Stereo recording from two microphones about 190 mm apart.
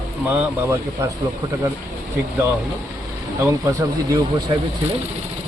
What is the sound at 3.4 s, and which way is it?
Speech, 15° right (ahead or behind).